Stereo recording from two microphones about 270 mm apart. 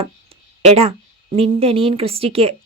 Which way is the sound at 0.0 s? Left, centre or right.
Right.